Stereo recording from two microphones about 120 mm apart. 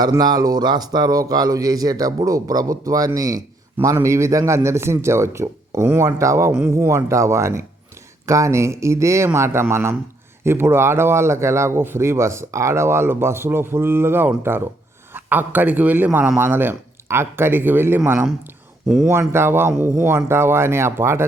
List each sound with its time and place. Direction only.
0.0 s a man's voice: 35° right (ahead or behind)
19.3 s a man's voice: 20° right (ahead or behind)